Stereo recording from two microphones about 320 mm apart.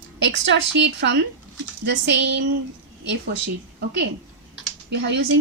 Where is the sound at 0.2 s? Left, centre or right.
Right.